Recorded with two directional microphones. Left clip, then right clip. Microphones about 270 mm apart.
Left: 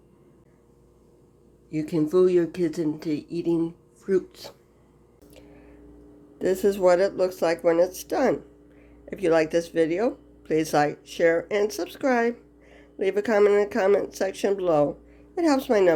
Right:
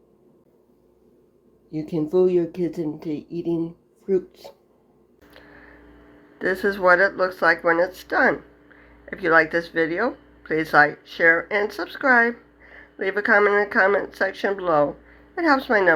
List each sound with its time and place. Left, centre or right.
1.7 s speech: centre
6.4 s speech: left